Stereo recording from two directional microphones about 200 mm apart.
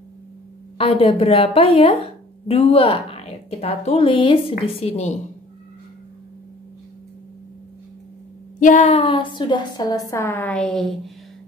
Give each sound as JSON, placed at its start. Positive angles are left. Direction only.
{"t": 0.7, "sound": "a woman's voice", "side_deg": 30}
{"t": 8.5, "sound": "a woman's voice", "side_deg": 40}